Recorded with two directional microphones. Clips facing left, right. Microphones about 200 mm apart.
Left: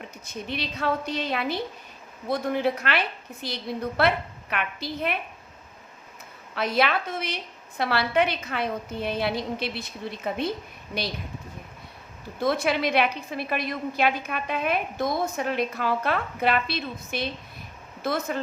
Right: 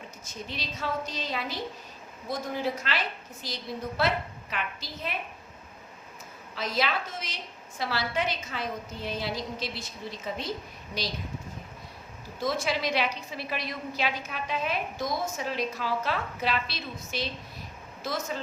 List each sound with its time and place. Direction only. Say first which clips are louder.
0.3 s a woman's voice: left 6 dB; 60° left (ahead or behind)
6.5 s a woman's voice: left 5 dB; 60° left (ahead or behind)
12.4 s a woman's voice: left 5 dB; 60° left (ahead or behind)